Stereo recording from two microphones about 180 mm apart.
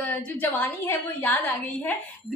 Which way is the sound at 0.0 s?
10° left (ahead or behind).